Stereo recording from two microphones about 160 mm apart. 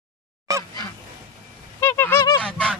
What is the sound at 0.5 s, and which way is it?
Goose, 20° right (ahead or behind).